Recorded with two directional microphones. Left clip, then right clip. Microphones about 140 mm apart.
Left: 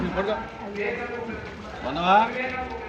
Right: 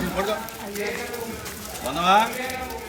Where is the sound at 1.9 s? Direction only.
20° right (ahead or behind).